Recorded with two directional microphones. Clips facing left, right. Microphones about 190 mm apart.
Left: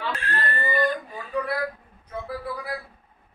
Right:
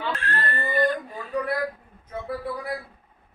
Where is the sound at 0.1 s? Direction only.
Centre (ahead or behind).